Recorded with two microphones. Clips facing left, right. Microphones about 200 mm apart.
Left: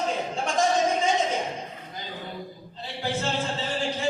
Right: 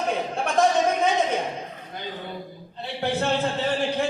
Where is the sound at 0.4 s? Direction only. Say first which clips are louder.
Right 3 dB; 60° right (ahead or behind).